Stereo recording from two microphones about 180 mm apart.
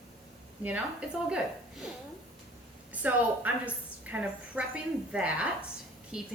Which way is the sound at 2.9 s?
10° right (ahead or behind).